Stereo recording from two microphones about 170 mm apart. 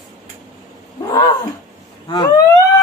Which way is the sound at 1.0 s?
20° left (ahead or behind).